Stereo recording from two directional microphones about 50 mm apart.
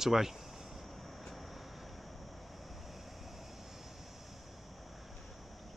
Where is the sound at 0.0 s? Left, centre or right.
Centre.